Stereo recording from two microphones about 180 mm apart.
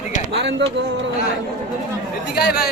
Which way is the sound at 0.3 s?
75° right (ahead or behind).